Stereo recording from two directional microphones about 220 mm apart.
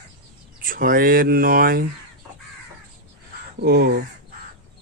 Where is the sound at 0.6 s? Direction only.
40° right (ahead or behind).